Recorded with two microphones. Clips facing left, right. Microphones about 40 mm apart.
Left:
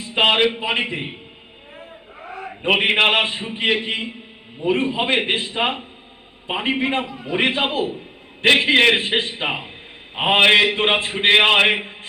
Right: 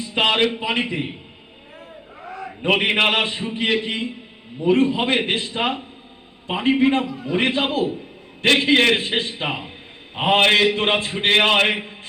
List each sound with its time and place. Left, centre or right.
0.0 s a man's voice: left
2.2 s a sound: centre
2.6 s a man's voice: centre
2.9 s a man's voice: centre
9.0 s a man's voice: left